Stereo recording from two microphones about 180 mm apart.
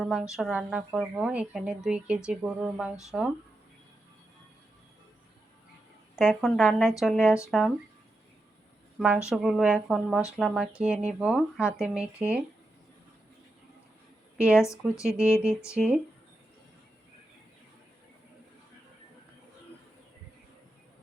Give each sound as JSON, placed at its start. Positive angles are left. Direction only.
{"t": 0.0, "sound": "speech", "side_deg": 0}
{"t": 6.1, "sound": "speech", "side_deg": 0}
{"t": 9.0, "sound": "speech", "side_deg": -5}
{"t": 14.3, "sound": "a woman's voice", "side_deg": -5}
{"t": 14.6, "sound": "speech", "side_deg": 15}
{"t": 15.7, "sound": "speech", "side_deg": -5}